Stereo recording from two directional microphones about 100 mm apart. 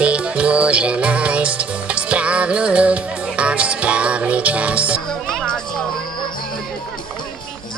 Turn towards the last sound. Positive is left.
turn(degrees=5)  # may be behind; listen again after turning